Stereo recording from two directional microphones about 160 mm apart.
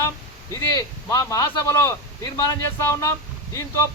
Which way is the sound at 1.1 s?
20° left (ahead or behind).